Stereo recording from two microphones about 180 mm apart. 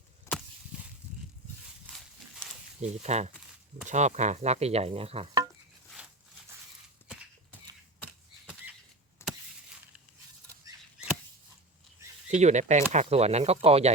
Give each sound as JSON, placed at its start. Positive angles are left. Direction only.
{"t": 0.3, "sound": "chop", "side_deg": 15}
{"t": 2.8, "sound": "speech", "side_deg": -40}
{"t": 9.2, "sound": "a sound", "side_deg": 15}
{"t": 12.3, "sound": "speech", "side_deg": -40}